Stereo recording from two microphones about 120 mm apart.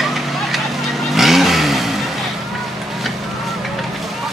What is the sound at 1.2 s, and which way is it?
Vehicle, centre (ahead or behind).